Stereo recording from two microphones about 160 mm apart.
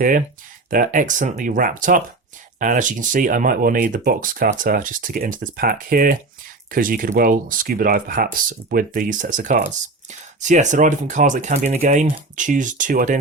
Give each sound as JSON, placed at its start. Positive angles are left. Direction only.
{"t": 0.0, "sound": "speech", "side_deg": -55}